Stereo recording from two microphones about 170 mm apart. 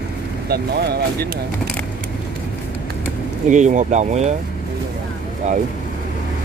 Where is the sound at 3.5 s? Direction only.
45° right (ahead or behind).